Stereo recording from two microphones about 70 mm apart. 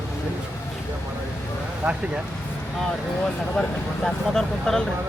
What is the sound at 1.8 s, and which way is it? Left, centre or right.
Speech, centre.